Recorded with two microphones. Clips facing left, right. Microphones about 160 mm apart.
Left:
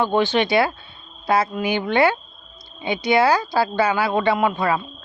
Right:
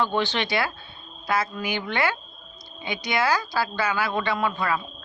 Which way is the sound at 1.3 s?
25° left (ahead or behind).